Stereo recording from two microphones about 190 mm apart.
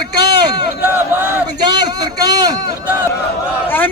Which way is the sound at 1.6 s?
20° right (ahead or behind).